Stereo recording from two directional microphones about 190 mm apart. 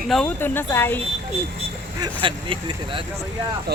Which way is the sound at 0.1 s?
5° left (ahead or behind).